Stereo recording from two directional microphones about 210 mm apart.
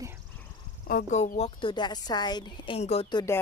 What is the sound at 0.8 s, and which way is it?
A woman's voice, 40° left (ahead or behind).